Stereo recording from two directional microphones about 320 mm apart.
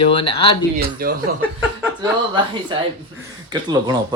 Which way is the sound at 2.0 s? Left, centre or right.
Centre.